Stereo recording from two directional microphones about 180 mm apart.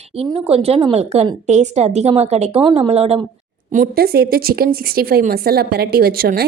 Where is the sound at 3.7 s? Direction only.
55° right (ahead or behind).